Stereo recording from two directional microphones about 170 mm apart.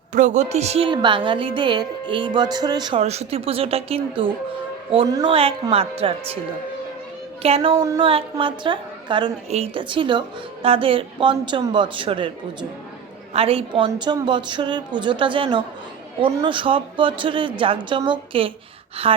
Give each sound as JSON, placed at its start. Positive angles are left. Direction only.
{"t": 0.1, "sound": "a woman's voice", "side_deg": -45}
{"t": 3.0, "sound": "a woman's voice", "side_deg": -40}
{"t": 5.0, "sound": "a woman's voice", "side_deg": -20}
{"t": 5.3, "sound": "a woman's voice", "side_deg": -35}
{"t": 7.4, "sound": "a woman's voice", "side_deg": -35}